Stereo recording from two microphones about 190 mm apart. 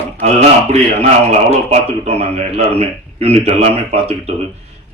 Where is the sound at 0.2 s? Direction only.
35° right (ahead or behind).